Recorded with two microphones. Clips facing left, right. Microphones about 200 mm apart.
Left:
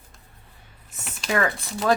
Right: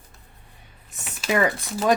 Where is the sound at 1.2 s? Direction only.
15° right (ahead or behind).